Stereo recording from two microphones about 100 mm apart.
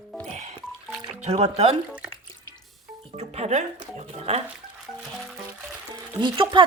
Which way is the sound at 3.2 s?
90° right.